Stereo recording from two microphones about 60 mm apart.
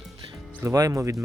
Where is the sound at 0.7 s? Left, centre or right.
Right.